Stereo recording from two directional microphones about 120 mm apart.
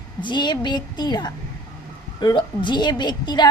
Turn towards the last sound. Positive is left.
turn(degrees=35)  # may be behind; listen again after turning